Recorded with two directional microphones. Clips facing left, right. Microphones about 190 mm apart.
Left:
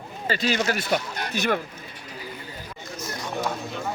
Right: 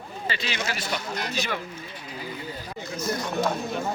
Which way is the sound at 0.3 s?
45° left (ahead or behind).